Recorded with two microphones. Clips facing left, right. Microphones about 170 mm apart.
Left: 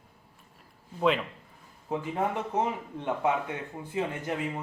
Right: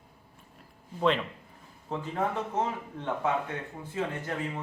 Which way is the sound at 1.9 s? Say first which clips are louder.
Left 1 dB; 15° left (ahead or behind).